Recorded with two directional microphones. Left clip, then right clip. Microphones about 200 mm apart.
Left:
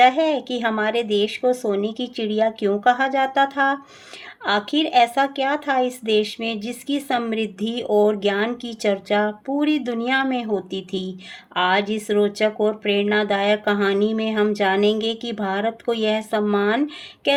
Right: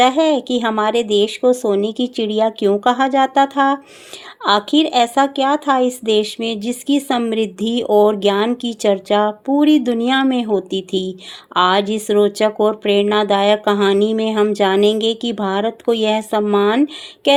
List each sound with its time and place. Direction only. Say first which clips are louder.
0.0 s speech: right 3 dB; 30° right (ahead or behind)